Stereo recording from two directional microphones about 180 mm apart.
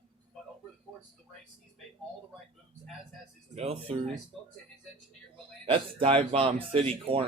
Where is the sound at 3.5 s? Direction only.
35° right (ahead or behind).